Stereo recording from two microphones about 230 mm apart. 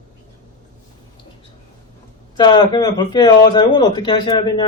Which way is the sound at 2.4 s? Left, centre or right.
Centre.